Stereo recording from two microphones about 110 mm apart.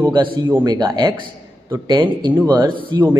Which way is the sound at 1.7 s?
40° right (ahead or behind).